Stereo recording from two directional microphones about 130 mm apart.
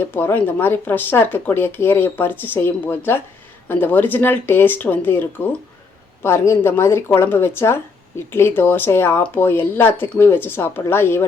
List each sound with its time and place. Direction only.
0.1 s speech: 15° left (ahead or behind)